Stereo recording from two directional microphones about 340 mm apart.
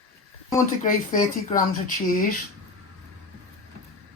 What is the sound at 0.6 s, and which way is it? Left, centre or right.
Speech, left.